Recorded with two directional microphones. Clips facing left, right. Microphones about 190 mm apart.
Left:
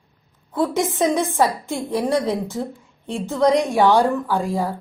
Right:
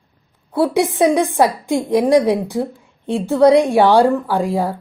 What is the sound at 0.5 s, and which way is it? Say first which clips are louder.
A woman's voice: right 5 dB; 15° right (ahead or behind).